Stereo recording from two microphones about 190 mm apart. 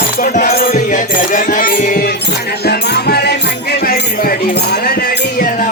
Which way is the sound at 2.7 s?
55° left (ahead or behind).